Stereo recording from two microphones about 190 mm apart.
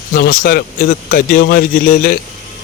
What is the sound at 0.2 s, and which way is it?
Speech, 50° left (ahead or behind).